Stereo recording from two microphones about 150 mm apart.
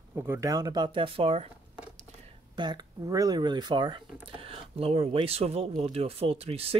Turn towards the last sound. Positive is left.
turn(degrees=-40)  # may be behind; listen again after turning